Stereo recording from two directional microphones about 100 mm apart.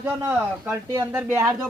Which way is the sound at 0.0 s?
25° right (ahead or behind).